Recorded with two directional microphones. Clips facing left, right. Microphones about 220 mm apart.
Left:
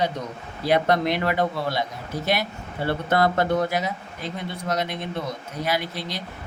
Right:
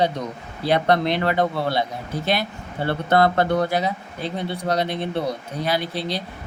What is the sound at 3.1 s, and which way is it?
Speech, 30° right (ahead or behind).